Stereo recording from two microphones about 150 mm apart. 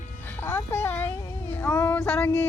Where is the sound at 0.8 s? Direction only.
15° left (ahead or behind).